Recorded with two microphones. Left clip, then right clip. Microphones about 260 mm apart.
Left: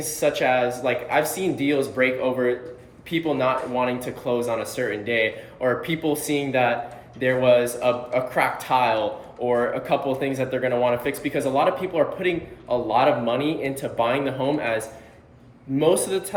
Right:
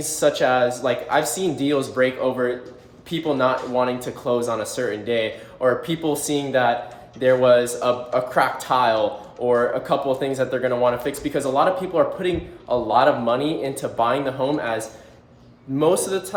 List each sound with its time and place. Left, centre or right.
0.0 s speech: centre
15.8 s speech: centre